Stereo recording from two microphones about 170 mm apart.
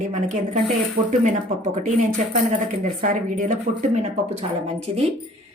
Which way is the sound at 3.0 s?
50° right (ahead or behind).